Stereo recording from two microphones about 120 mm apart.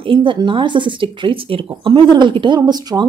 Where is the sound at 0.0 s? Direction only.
45° right (ahead or behind).